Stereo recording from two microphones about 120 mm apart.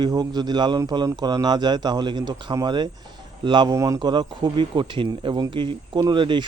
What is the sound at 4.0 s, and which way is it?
Speech, 40° right (ahead or behind).